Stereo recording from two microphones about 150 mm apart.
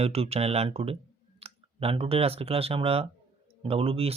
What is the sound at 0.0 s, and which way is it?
Speech, 45° right (ahead or behind).